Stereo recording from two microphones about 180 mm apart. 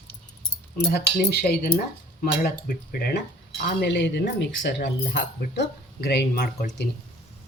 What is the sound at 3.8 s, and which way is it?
Speech, 75° left (ahead or behind).